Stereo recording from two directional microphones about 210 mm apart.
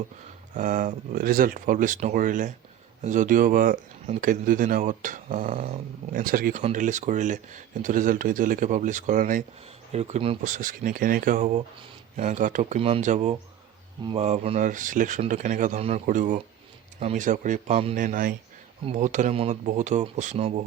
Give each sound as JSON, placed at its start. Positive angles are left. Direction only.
{"t": 0.5, "sound": "speech", "side_deg": -40}